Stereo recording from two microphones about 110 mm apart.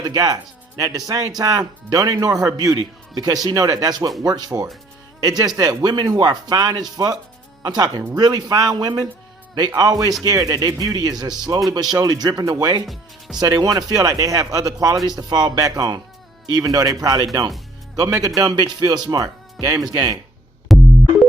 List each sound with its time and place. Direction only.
0.1 s speech: 35° right (ahead or behind)
12.8 s speech: centre (ahead or behind)
13.4 s speech: 35° right (ahead or behind)
20.7 s music: centre (ahead or behind)